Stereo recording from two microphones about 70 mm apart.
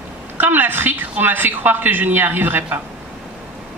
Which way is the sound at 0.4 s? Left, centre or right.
Right.